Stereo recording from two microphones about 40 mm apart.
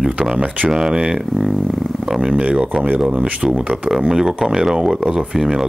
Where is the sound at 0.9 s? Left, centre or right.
Right.